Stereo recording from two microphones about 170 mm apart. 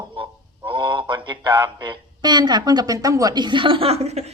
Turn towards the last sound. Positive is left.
turn(degrees=-40)  # may be behind; listen again after turning